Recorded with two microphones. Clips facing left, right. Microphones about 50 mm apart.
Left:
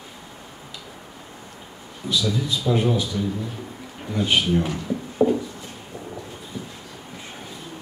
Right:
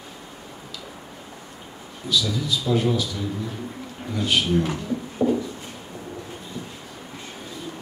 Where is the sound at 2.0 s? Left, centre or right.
Left.